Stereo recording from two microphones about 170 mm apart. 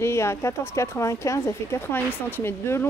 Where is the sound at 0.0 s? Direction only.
15° left (ahead or behind).